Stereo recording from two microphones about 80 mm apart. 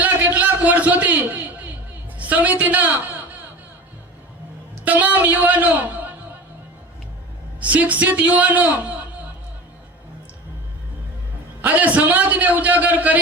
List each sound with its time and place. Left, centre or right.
0.0 s a sound: right
2.1 s a woman's voice: centre
4.9 s a man's voice: centre
7.6 s a man's voice: centre
11.6 s a man's voice: right